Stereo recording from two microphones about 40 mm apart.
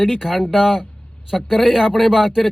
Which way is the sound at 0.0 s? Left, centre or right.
Centre.